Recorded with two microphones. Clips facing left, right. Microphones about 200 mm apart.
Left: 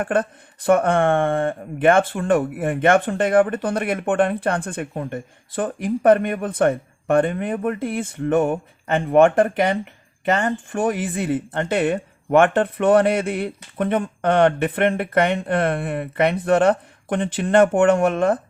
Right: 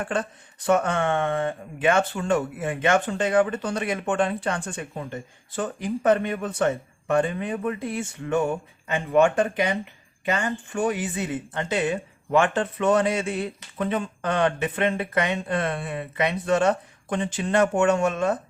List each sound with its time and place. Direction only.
0.0 s speech: 55° left (ahead or behind)